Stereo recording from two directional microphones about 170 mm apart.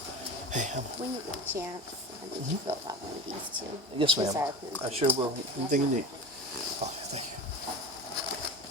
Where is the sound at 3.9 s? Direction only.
30° right (ahead or behind).